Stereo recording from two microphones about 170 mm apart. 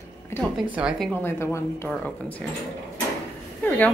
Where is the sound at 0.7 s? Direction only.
Centre (ahead or behind).